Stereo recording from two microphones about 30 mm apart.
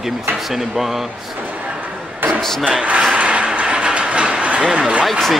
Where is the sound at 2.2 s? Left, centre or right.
Right.